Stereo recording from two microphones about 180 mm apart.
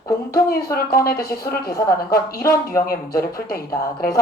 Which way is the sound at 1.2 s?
20° left (ahead or behind).